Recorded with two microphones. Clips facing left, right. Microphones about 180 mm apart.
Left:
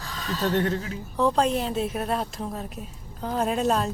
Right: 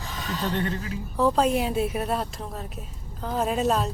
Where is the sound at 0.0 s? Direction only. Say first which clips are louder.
Right 1 dB; 20° right (ahead or behind).